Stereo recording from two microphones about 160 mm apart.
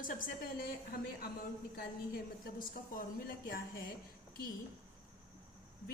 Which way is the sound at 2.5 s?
60° left (ahead or behind).